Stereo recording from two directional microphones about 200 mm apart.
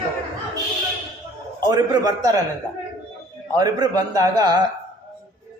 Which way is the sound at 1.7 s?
20° right (ahead or behind).